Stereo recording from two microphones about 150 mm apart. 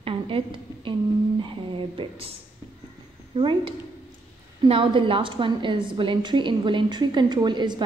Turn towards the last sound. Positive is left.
turn(degrees=-30)  # may be behind; listen again after turning